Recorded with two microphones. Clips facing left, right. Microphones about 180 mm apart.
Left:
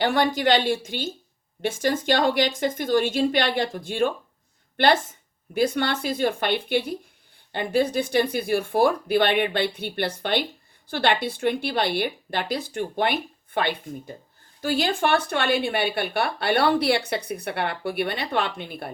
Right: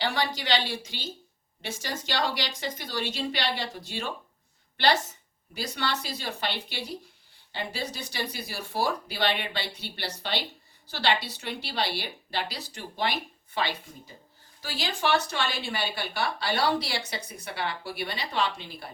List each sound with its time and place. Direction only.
0.0 s a woman's voice: 50° left (ahead or behind)
5.5 s a woman's voice: 55° left (ahead or behind)